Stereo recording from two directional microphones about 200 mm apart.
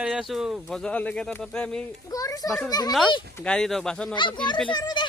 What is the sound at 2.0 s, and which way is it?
Speech, 15° left (ahead or behind).